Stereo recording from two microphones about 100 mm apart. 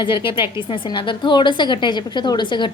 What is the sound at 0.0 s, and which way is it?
A woman's voice, 55° left (ahead or behind).